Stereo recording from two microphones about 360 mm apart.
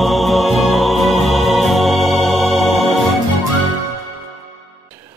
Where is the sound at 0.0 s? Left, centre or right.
Centre.